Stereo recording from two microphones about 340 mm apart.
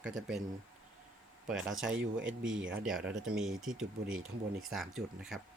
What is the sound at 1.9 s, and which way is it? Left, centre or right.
Speech, right.